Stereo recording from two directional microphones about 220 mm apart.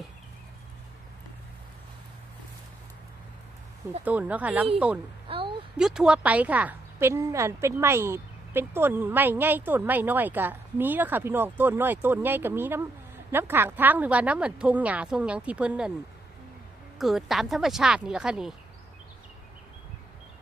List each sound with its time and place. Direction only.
4.0 s a woman's voice: 5° right (ahead or behind)
5.3 s a sound: 25° right (ahead or behind)
5.7 s a woman's voice: 5° right (ahead or behind)
17.0 s a woman's voice: centre (ahead or behind)